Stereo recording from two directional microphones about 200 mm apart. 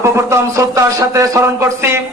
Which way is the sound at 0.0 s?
15° right (ahead or behind).